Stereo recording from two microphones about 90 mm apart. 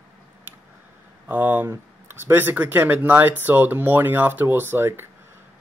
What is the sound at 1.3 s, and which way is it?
Speech, 20° right (ahead or behind).